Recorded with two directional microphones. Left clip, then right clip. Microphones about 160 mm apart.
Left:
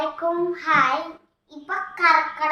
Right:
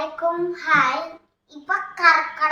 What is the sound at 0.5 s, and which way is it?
Child singing, 15° left (ahead or behind).